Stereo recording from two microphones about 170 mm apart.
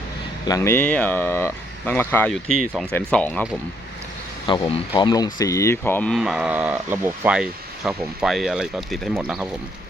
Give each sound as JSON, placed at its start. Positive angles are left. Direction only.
{"t": 0.4, "sound": "speech", "side_deg": 20}
{"t": 4.4, "sound": "speech", "side_deg": 25}
{"t": 6.1, "sound": "speech", "side_deg": -5}